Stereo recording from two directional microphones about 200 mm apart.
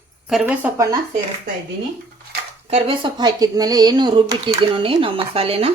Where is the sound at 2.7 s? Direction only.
25° right (ahead or behind).